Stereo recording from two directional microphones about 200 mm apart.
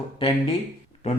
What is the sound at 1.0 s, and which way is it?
Speech, 35° left (ahead or behind).